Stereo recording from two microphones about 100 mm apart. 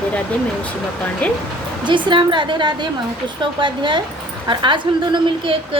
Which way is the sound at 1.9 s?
55° right (ahead or behind).